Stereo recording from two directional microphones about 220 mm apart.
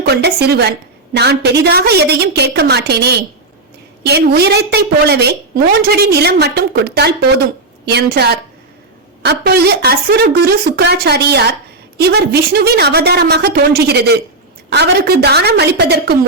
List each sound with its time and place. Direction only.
0.1 s a woman's voice: 45° right (ahead or behind)